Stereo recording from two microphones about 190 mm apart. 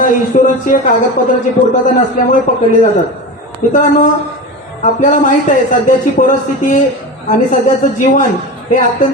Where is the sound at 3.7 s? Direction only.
40° left (ahead or behind).